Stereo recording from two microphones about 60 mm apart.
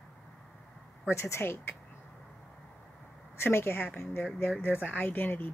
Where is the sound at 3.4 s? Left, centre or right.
Left.